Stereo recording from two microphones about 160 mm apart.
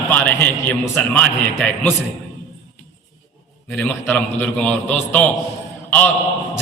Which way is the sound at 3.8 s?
10° left (ahead or behind).